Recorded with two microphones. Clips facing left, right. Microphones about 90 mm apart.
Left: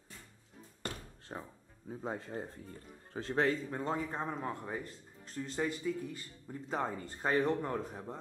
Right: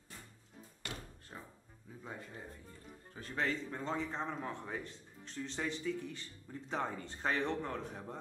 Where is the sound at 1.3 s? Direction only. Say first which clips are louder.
Left 7 dB; 45° left (ahead or behind).